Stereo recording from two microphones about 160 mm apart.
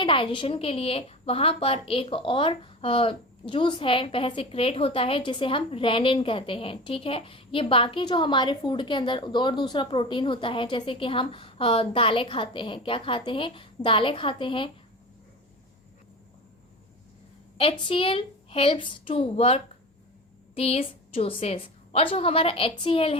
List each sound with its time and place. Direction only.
0.0 s a woman's voice: 30° left (ahead or behind)
17.6 s a woman's voice: 35° left (ahead or behind)